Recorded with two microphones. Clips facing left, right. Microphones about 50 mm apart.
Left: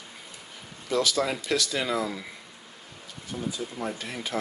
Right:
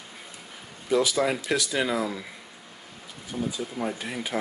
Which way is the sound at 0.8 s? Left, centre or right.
Centre.